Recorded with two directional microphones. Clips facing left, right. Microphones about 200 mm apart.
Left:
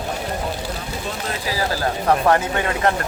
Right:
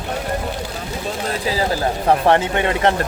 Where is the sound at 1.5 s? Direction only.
20° right (ahead or behind).